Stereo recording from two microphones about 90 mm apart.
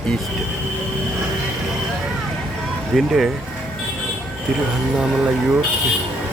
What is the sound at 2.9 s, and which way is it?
Speech, 5° right (ahead or behind).